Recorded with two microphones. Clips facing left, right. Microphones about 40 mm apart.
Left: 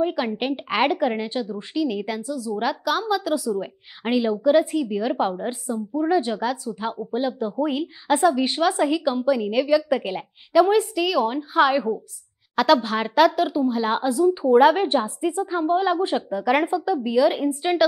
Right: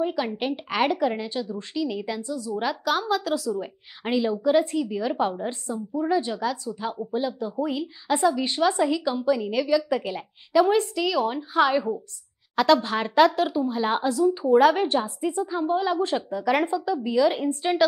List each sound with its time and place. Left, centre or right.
0.0 s a woman's voice: centre
2.5 s a woman's voice: centre
3.3 s a woman's voice: centre
14.0 s a woman's voice: centre